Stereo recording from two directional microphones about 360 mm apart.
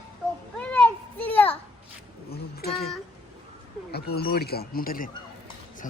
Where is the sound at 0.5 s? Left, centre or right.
Centre.